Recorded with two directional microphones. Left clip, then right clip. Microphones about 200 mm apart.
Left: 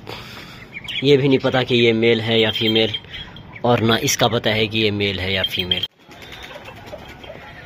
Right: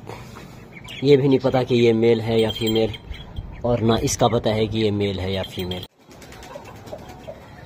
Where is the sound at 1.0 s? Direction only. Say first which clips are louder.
Left 1 dB; centre (ahead or behind).